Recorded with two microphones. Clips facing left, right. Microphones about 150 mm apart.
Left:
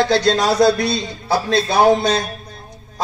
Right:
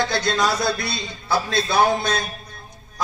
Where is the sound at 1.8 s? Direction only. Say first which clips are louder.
Left 7 dB; 75° left (ahead or behind).